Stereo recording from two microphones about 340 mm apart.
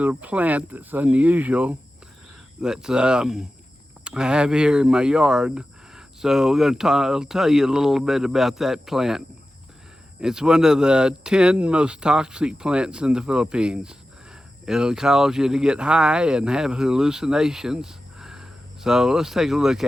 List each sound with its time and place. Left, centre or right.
0.0 s speech: centre